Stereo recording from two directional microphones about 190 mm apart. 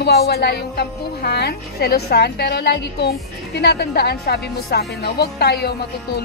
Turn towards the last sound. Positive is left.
turn(degrees=60)  # may be behind; listen again after turning